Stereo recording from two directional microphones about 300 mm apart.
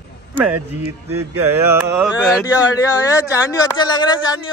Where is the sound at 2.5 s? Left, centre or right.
Centre.